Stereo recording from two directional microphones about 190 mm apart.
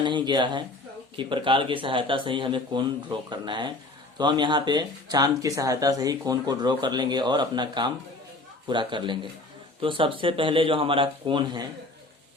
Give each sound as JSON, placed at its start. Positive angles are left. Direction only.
{"t": 0.0, "sound": "speech", "side_deg": -25}